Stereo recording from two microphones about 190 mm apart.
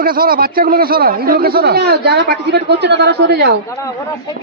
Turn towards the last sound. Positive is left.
turn(degrees=15)  # may be behind; listen again after turning